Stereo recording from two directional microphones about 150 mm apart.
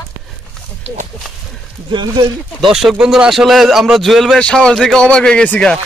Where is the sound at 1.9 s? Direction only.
30° right (ahead or behind).